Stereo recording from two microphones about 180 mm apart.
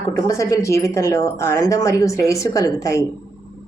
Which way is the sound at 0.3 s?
15° left (ahead or behind).